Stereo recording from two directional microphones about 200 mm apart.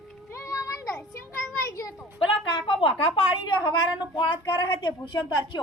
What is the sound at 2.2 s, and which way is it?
Speech, 25° left (ahead or behind).